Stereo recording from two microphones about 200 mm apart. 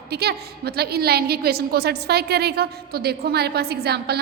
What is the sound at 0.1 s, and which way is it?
A woman's voice, 55° right (ahead or behind).